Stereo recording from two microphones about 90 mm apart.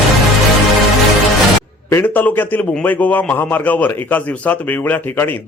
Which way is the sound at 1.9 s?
20° left (ahead or behind).